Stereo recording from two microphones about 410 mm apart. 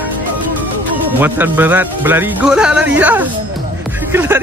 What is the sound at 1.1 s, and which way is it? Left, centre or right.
Speech, centre.